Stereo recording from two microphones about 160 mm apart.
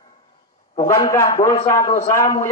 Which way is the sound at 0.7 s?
20° left (ahead or behind).